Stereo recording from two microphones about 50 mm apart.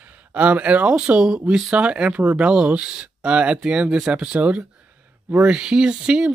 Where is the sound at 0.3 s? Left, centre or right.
Right.